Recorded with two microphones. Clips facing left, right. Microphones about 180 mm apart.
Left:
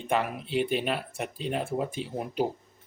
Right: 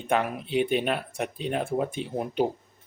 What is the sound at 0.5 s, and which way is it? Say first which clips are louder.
Speech: right 3 dB; centre (ahead or behind).